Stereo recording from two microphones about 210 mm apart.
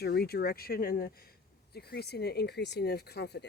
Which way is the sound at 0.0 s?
50° left (ahead or behind).